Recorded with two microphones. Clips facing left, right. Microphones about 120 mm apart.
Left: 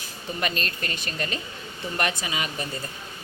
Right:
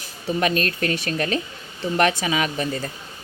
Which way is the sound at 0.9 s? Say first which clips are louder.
Right 8 dB; 75° right (ahead or behind).